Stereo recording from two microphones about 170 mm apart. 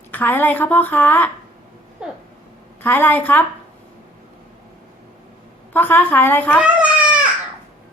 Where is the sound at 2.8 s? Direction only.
10° left (ahead or behind).